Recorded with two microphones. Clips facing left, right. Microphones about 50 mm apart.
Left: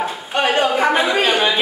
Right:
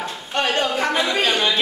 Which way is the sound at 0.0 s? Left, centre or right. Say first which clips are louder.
Left 4 dB; centre.